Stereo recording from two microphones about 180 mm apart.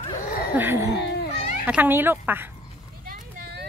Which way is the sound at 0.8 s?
70° left (ahead or behind).